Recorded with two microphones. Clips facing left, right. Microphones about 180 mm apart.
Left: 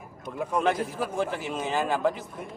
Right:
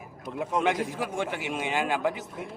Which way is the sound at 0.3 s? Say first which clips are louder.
Left 1 dB; 20° right (ahead or behind).